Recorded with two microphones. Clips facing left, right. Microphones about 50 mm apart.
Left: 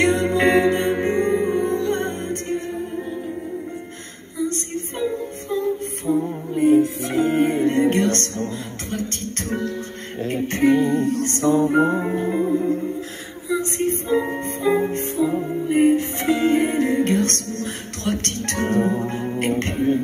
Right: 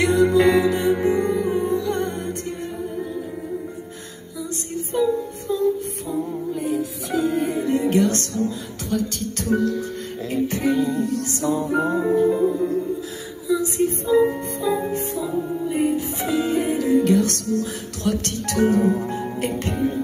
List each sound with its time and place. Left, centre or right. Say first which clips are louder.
0.0 s music: right 2 dB; left
4.9 s music: right 5 dB; left